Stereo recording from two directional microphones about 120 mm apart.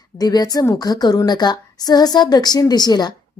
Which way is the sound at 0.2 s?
35° left (ahead or behind).